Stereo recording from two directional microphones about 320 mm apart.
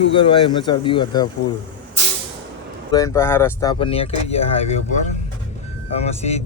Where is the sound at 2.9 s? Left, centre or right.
Centre.